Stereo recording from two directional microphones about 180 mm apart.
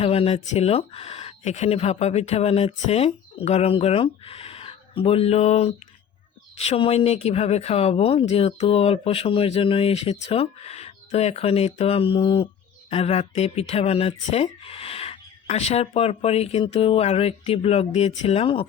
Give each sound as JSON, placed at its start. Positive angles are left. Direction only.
{"t": 0.0, "sound": "speech", "side_deg": 35}